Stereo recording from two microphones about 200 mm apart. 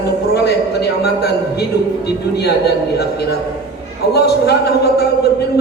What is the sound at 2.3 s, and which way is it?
Speech, 55° left (ahead or behind).